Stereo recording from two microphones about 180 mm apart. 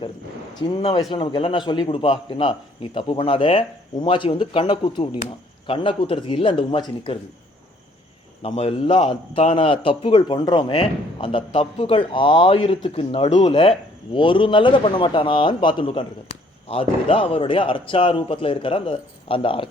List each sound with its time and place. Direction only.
0.8 s a man's voice: 30° left (ahead or behind)
8.4 s a man's voice: 35° left (ahead or behind)